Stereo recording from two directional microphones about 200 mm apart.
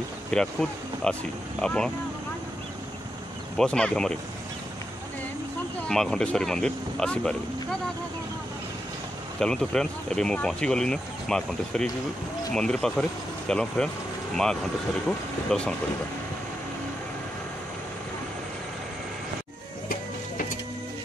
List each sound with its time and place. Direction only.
0.3 s speech: 5° left (ahead or behind)
3.5 s speech: 5° left (ahead or behind)
5.9 s speech: 5° left (ahead or behind)
9.4 s speech: 5° left (ahead or behind)